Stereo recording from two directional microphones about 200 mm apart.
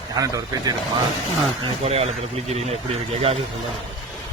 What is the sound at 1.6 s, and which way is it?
Speech, 30° right (ahead or behind).